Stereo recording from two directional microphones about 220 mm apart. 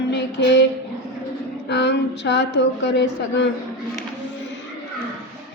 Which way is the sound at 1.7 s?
50° left (ahead or behind).